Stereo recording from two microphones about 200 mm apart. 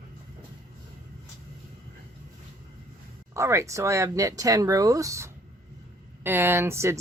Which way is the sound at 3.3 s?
15° right (ahead or behind).